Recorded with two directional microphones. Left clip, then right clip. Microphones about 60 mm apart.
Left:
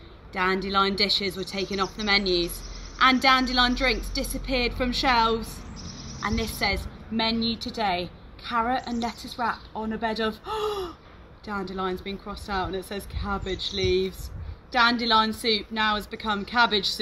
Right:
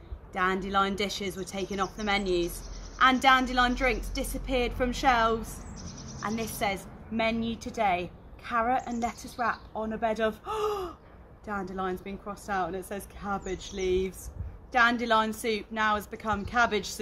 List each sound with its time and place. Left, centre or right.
0.3 s a woman's voice: right
6.6 s a woman's voice: centre
11.7 s a woman's voice: centre